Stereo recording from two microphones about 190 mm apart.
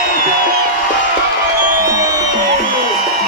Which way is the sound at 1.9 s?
15° right (ahead or behind).